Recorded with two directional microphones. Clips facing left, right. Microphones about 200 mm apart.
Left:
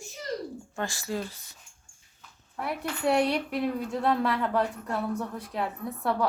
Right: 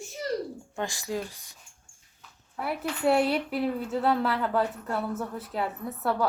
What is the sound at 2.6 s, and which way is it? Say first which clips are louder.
A woman's voice: right 1 dB; centre (ahead or behind).